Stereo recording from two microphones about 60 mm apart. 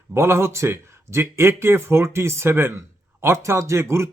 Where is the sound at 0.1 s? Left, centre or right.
Right.